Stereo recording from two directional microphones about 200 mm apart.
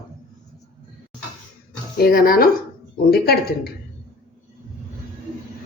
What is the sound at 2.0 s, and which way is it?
A woman's voice, 45° left (ahead or behind).